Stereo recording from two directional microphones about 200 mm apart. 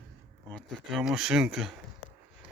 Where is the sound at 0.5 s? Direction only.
Centre (ahead or behind).